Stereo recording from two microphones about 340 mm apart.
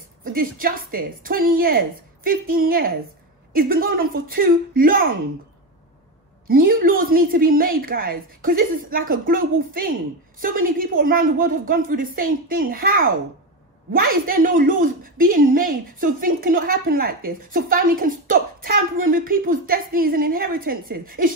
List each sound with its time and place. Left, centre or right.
0.2 s a woman's voice: right
6.4 s a woman's voice: right